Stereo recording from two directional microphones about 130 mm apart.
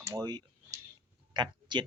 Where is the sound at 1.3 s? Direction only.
35° right (ahead or behind).